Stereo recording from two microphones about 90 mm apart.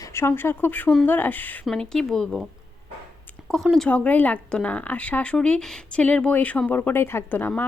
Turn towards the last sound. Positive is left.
turn(degrees=20)  # may be behind; listen again after turning